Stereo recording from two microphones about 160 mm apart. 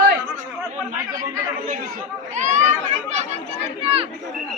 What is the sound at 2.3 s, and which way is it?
Speech, 50° right (ahead or behind).